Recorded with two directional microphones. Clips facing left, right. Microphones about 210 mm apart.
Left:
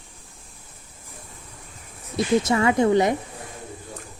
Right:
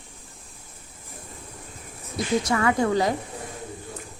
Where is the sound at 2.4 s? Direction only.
25° left (ahead or behind).